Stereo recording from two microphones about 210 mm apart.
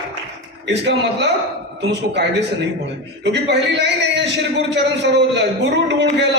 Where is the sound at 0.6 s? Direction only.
55° right (ahead or behind).